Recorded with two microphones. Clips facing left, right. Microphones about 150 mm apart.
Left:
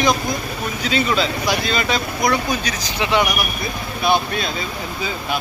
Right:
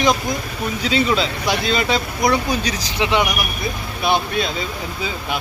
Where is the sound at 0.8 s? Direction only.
25° right (ahead or behind).